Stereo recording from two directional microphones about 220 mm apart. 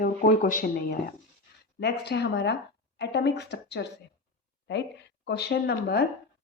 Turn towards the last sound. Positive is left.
turn(degrees=45)  # may be behind; listen again after turning